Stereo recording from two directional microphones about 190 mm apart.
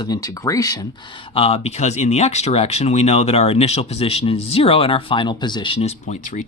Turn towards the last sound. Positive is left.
turn(degrees=40)  # may be behind; listen again after turning